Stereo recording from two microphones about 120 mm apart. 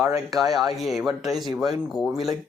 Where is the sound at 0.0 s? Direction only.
30° right (ahead or behind).